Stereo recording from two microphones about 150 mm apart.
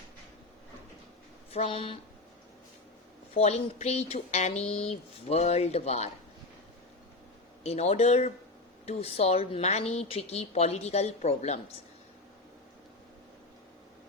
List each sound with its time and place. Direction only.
1.5 s speech: 40° left (ahead or behind)
3.3 s speech: 45° left (ahead or behind)
7.6 s speech: 45° left (ahead or behind)